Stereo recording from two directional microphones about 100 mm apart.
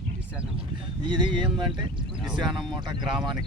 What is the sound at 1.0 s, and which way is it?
Speech, 50° right (ahead or behind).